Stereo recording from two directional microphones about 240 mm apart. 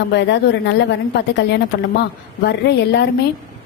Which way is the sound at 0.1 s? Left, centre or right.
Left.